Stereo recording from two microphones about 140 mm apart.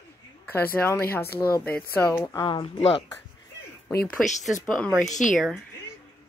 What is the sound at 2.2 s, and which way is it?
Speech, 30° left (ahead or behind).